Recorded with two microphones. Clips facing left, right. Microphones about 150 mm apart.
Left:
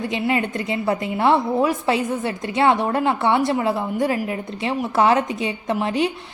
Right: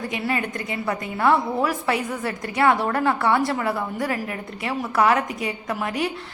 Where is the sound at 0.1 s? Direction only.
25° left (ahead or behind).